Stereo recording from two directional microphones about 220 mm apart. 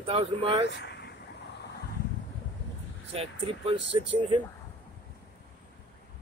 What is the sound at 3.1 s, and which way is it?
Speech, 25° right (ahead or behind).